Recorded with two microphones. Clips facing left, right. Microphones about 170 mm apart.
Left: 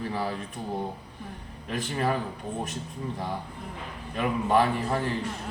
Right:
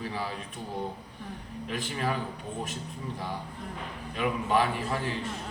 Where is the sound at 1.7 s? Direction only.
40° left (ahead or behind).